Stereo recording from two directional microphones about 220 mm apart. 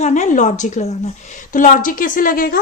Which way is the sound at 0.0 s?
35° left (ahead or behind).